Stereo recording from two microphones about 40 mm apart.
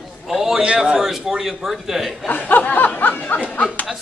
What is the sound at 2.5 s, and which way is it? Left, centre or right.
Speech, left.